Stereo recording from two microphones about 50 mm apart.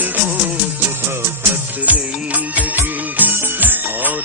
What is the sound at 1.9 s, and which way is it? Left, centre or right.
Music of bollywood, right.